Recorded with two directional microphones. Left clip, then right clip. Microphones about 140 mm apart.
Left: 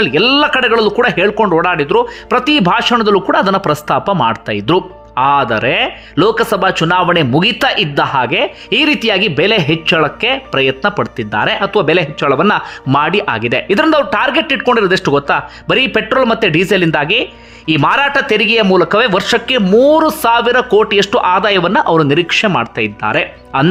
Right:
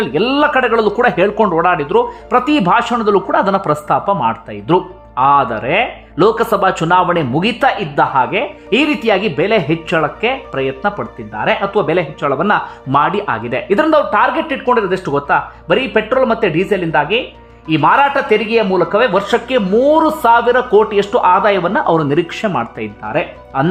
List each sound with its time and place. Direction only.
0.0 s speech: 15° left (ahead or behind); by 4.8 s 35° left (ahead or behind)
5.1 s speech: 10° left (ahead or behind)
5.6 s speech: 25° left (ahead or behind)
6.3 s speech: 5° left (ahead or behind); by 8.8 s 25° left (ahead or behind)
8.8 s speech: 15° left (ahead or behind)
11.2 s speech: 40° left (ahead or behind)
11.6 s speech: 20° left (ahead or behind)